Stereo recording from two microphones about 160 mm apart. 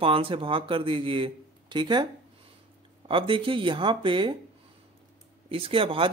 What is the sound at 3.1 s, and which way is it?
Speech, 35° right (ahead or behind).